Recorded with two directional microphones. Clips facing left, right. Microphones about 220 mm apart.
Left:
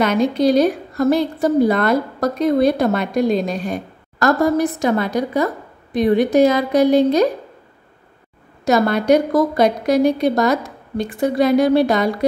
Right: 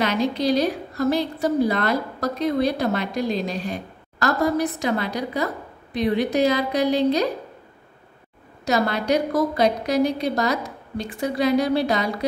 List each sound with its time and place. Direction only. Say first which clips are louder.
0.0 s a woman's voice: left 6 dB; 50° left (ahead or behind)
8.6 s a woman's voice: left 7 dB; 50° left (ahead or behind)